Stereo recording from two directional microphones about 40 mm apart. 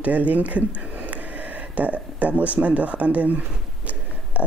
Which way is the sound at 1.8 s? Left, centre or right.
Right.